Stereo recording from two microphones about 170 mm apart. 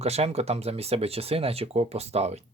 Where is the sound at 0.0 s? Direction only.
40° right (ahead or behind).